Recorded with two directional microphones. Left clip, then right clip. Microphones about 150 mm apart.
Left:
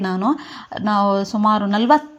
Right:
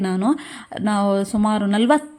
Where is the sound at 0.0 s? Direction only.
20° right (ahead or behind).